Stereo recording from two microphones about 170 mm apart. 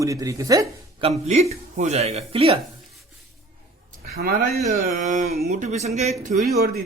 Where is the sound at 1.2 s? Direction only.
40° right (ahead or behind).